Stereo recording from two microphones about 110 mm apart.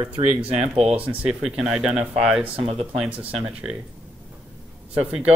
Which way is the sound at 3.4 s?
10° right (ahead or behind).